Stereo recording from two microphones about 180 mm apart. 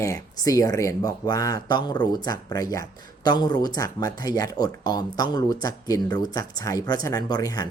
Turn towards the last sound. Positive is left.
turn(degrees=20)  # may be behind; listen again after turning